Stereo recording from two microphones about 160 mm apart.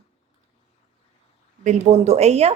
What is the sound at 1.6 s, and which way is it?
Speech, 40° right (ahead or behind).